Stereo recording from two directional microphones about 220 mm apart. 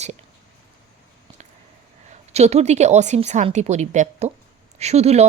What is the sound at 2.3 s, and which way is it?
Speech, 30° right (ahead or behind).